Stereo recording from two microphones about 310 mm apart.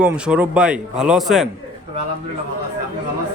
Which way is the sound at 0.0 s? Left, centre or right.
Centre.